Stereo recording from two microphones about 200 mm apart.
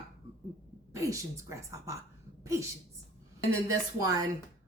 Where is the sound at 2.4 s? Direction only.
15° right (ahead or behind).